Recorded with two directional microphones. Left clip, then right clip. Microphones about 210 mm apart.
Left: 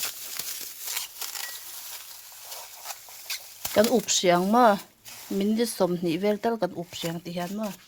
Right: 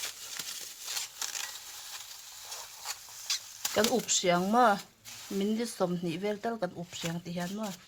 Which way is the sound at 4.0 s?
30° left (ahead or behind).